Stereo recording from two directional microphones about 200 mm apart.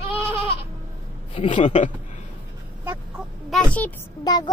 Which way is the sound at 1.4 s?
25° left (ahead or behind).